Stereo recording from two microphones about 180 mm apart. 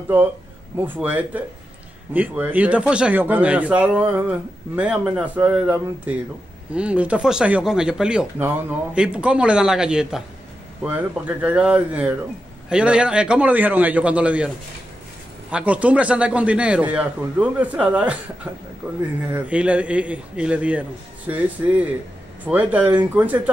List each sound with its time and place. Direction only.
0.7 s speech: 10° right (ahead or behind)
15.5 s speech: 5° right (ahead or behind)